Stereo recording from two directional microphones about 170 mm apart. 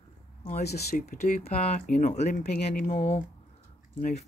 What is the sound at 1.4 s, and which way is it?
Speech, 35° left (ahead or behind).